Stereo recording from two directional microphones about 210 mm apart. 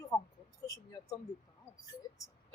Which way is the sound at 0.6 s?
15° left (ahead or behind).